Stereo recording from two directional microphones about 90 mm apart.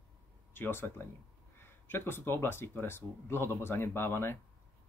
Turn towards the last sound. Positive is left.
turn(degrees=25)  # may be behind; listen again after turning